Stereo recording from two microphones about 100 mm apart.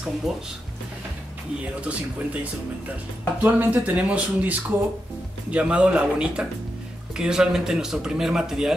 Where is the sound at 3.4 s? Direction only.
15° right (ahead or behind).